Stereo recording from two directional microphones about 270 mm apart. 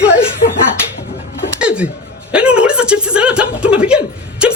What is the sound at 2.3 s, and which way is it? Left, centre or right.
Chuckle, centre.